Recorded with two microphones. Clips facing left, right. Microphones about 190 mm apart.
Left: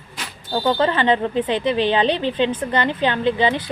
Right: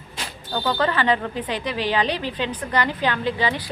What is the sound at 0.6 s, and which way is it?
A woman's voice, 25° left (ahead or behind).